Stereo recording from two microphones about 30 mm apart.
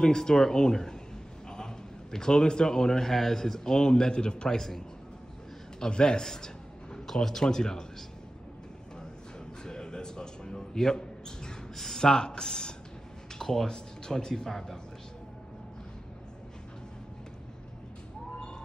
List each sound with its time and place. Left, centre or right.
0.0 s a man's voice: left
1.5 s a sound: left
3.1 s a man's voice: centre; by 4.6 s left
4.6 s a man's voice: centre
5.8 s a man's voice: left
7.4 s a man's voice: left
9.7 s music: left
11.7 s a sound: centre
13.4 s a sound: centre
13.7 s a man's voice: left